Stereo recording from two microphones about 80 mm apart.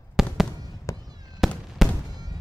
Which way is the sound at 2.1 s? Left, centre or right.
Right.